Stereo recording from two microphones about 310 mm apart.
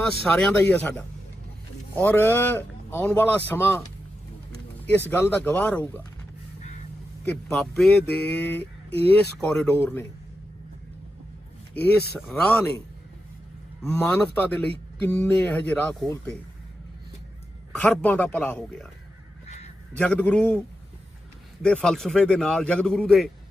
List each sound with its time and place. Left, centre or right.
0.0 s a man's voice: centre
4.9 s speech: centre
7.3 s speech: centre
11.7 s speech: left
12.3 s speech: centre
13.8 s speech: centre
17.7 s speech: centre
19.5 s crow: left
20.0 s speech: centre
21.6 s speech: centre